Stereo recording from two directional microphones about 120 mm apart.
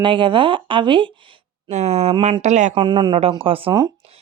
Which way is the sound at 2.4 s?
80° right.